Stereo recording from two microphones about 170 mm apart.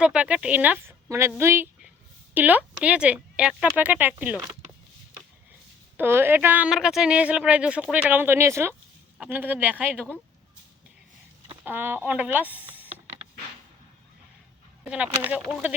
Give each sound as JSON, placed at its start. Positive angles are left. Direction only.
{"t": 0.0, "sound": "a woman's voice", "side_deg": -5}
{"t": 6.0, "sound": "speech", "side_deg": -15}
{"t": 11.6, "sound": "speech", "side_deg": -10}
{"t": 14.8, "sound": "speech", "side_deg": -5}